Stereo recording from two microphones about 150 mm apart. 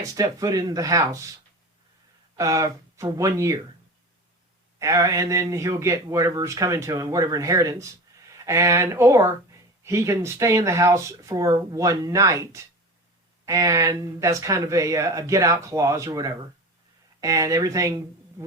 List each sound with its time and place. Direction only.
0.0 s speech: 25° right (ahead or behind)
2.3 s speech: 20° right (ahead or behind)
4.8 s speech: 20° right (ahead or behind)